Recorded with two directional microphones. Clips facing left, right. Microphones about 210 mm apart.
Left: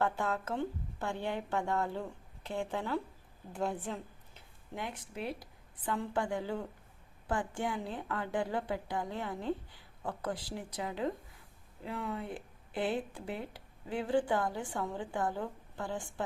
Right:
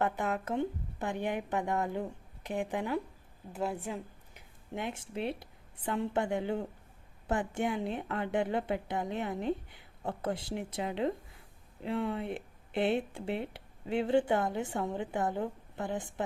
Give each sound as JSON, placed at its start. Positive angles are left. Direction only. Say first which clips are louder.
{"t": 0.0, "sound": "a woman's voice", "louder": "right 1 dB", "side_deg": -20}
{"t": 4.7, "sound": "speech", "louder": "right 4 dB", "side_deg": -25}